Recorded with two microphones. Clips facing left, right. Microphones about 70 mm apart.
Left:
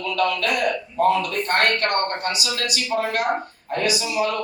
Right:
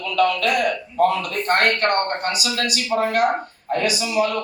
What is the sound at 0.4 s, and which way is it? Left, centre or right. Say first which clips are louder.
A man's voice: right 2 dB; right.